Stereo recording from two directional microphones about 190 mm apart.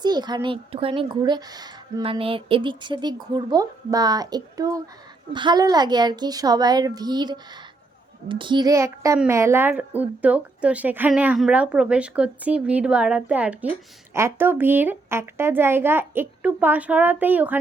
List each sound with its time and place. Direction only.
0.0 s a woman's voice: 20° right (ahead or behind)